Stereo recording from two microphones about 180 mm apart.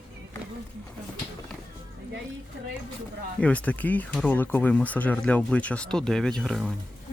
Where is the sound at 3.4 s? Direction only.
5° left (ahead or behind).